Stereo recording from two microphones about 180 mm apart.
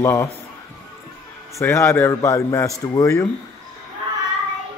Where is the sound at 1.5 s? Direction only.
15° left (ahead or behind).